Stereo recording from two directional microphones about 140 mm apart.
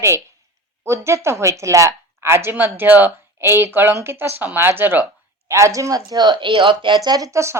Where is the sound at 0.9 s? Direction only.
20° right (ahead or behind).